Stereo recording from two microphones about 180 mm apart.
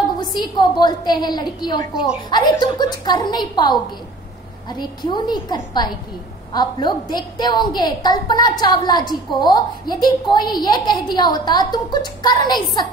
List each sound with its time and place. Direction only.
0.4 s a woman's voice: 25° left (ahead or behind)